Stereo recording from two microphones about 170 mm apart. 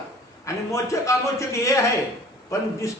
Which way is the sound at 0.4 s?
20° left (ahead or behind).